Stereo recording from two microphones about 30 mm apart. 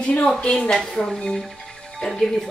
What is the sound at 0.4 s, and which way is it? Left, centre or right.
Speech, left.